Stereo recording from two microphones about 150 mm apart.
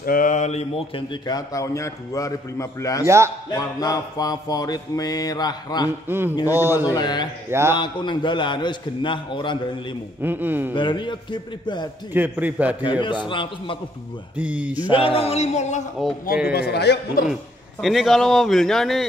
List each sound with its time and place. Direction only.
0.0 s a man's voice: 65° left (ahead or behind); by 5.9 s 25° left (ahead or behind)
6.0 s a man's voice: 15° right (ahead or behind)
6.9 s a man's voice: 30° left (ahead or behind)
7.4 s a man's voice: 15° right (ahead or behind)
7.7 s a man's voice: 30° left (ahead or behind)
10.2 s a man's voice: 10° right (ahead or behind)
10.7 s a man's voice: 30° left (ahead or behind)
12.1 s a man's voice: 10° right (ahead or behind)
13.0 s a man's voice: 30° left (ahead or behind)
14.3 s a man's voice: 10° right (ahead or behind)
14.9 s a sound: 35° left (ahead or behind)
16.5 s a man's voice: 90° left
17.3 s a man's voice: centre (ahead or behind)